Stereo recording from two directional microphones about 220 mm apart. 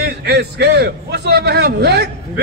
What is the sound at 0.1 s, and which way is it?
A man's voice, 50° right (ahead or behind).